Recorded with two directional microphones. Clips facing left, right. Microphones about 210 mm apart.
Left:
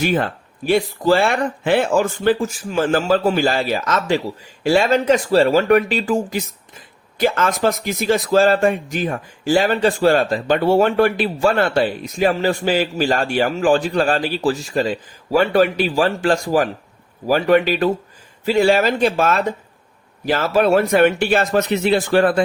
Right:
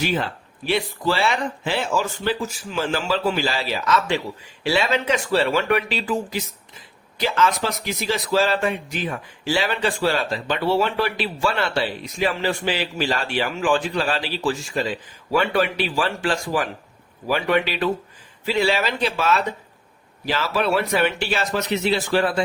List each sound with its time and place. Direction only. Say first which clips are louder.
0.0 s speech: left 5 dB; 50° left (ahead or behind)